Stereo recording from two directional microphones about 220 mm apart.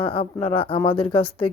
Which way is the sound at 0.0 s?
25° left (ahead or behind).